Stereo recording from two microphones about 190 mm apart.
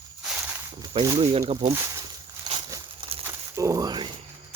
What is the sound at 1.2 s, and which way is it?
Speech, 30° right (ahead or behind).